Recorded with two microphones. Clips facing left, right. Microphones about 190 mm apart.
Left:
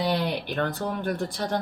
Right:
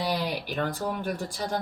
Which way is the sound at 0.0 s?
5° right (ahead or behind).